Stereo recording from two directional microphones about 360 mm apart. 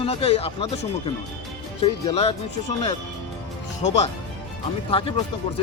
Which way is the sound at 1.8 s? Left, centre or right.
Centre.